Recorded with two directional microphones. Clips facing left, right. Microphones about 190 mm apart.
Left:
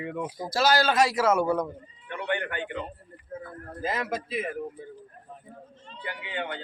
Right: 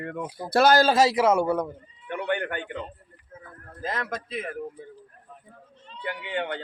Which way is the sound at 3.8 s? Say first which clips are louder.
Left 1 dB; 5° left (ahead or behind).